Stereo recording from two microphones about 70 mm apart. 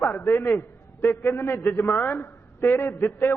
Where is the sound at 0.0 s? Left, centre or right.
Left.